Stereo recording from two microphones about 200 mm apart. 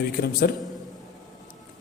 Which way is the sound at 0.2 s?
45° left (ahead or behind).